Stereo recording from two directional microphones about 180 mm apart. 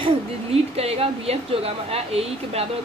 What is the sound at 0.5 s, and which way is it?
A woman's voice, 35° right (ahead or behind).